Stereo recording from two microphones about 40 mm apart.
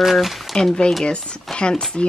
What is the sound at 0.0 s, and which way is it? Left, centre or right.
Speech, centre.